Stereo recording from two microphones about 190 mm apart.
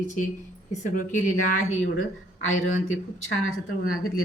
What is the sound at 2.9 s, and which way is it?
Speech, 90° left.